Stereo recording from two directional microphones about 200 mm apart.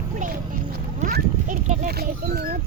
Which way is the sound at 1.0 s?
40° right (ahead or behind).